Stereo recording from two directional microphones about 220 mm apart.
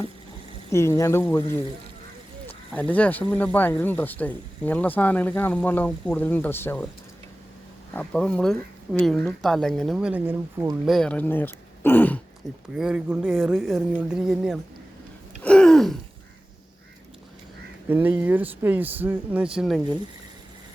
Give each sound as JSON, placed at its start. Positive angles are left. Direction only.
{"t": 0.7, "sound": "speech", "side_deg": 10}
{"t": 7.9, "sound": "speech", "side_deg": 5}
{"t": 12.7, "sound": "speech", "side_deg": -5}
{"t": 15.4, "sound": "a sound", "side_deg": 5}
{"t": 17.8, "sound": "speech", "side_deg": -10}